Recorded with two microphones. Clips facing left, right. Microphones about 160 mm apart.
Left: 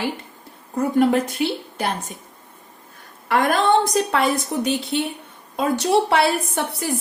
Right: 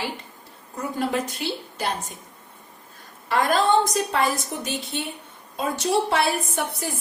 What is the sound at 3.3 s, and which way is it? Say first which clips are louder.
A woman's voice: left 2 dB; 55° left (ahead or behind).